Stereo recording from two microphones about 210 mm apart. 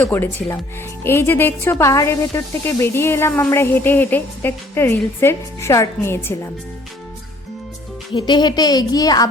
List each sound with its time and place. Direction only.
0.0 s a woman's voice: 10° left (ahead or behind)
8.1 s a woman's voice: 20° left (ahead or behind)